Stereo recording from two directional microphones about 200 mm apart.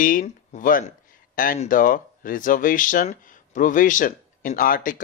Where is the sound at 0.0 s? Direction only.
45° left (ahead or behind).